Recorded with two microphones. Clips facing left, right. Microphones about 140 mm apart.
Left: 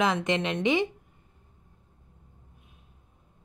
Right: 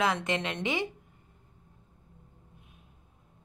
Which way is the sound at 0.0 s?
20° left (ahead or behind).